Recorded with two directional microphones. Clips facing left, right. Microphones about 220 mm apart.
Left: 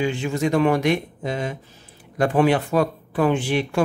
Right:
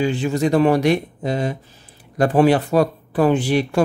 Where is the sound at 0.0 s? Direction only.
35° right (ahead or behind).